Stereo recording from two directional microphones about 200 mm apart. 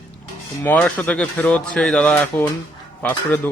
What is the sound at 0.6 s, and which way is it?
Speech, 5° left (ahead or behind).